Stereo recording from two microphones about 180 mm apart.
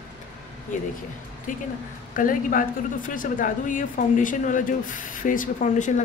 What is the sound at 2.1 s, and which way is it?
Speech, 50° left (ahead or behind).